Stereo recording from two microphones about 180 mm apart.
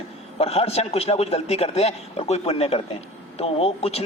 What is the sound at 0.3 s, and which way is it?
A man's voice, 35° left (ahead or behind).